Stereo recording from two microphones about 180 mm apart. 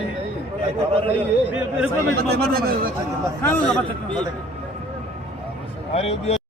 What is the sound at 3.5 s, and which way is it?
Speech, 5° left (ahead or behind).